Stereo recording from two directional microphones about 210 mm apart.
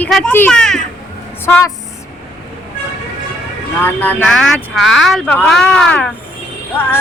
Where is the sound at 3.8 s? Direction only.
10° left (ahead or behind).